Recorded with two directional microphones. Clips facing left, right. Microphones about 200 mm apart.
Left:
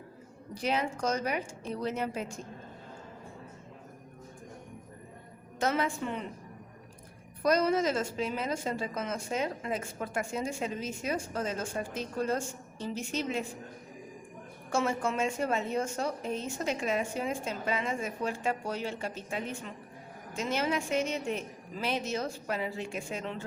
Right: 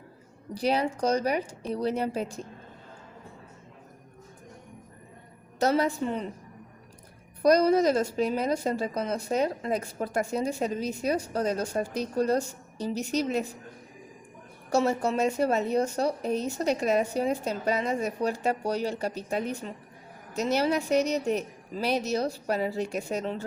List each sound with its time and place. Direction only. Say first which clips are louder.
0.5 s a woman's voice: right 5 dB; 35° right (ahead or behind)
5.5 s a woman's voice: right 5 dB; 35° right (ahead or behind)
7.4 s a woman's voice: right 6 dB; 40° right (ahead or behind)
14.7 s a woman's voice: right 5 dB; 40° right (ahead or behind)